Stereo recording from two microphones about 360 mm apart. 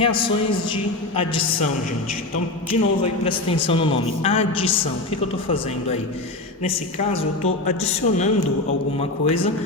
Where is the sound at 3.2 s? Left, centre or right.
Centre.